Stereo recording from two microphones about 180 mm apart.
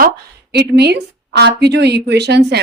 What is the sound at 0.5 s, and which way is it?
A woman's voice, 65° right (ahead or behind).